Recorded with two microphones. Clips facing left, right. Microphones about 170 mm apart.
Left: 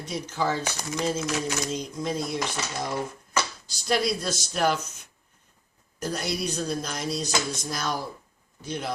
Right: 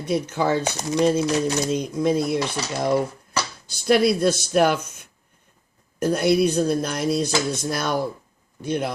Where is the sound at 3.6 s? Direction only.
55° right (ahead or behind).